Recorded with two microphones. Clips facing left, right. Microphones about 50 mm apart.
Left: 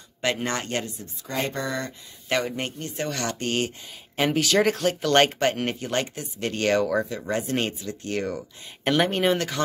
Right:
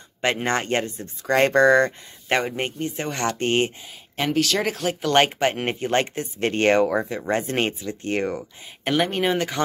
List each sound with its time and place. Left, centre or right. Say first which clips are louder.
0.2 s speech: right 4 dB; right
1.2 s speech: right 12 dB; right
2.2 s speech: right 3 dB; right
4.2 s speech: left 1 dB; centre; by 7.2 s right
7.2 s speech: right 3 dB; right
8.8 s speech: even; centre